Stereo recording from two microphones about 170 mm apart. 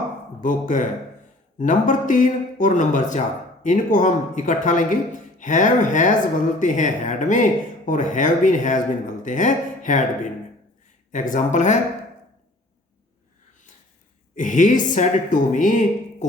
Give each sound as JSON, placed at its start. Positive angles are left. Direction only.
{"t": 0.4, "sound": "speech", "side_deg": 50}
{"t": 11.1, "sound": "speech", "side_deg": 45}
{"t": 14.3, "sound": "speech", "side_deg": 50}